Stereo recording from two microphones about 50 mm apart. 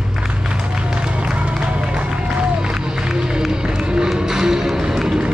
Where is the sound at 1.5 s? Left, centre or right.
Centre.